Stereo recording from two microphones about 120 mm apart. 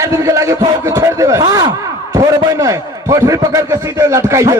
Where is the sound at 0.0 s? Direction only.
30° right (ahead or behind).